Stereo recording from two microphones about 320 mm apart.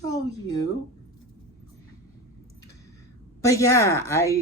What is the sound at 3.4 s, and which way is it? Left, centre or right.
Speech, centre.